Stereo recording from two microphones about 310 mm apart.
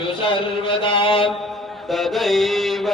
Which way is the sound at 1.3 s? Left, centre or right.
Centre.